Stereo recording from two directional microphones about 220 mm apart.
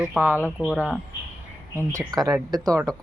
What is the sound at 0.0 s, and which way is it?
Speech, 5° right (ahead or behind).